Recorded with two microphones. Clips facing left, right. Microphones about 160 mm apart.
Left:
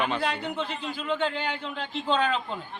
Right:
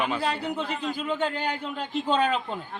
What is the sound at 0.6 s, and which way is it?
Speech, 40° right (ahead or behind).